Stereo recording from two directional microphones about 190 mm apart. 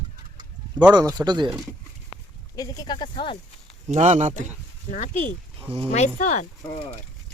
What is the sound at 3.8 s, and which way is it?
Speech, 35° right (ahead or behind).